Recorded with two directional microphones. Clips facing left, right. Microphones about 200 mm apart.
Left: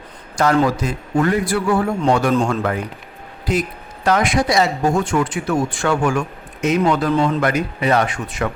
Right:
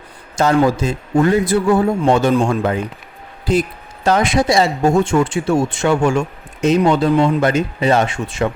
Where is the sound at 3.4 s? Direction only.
30° right (ahead or behind).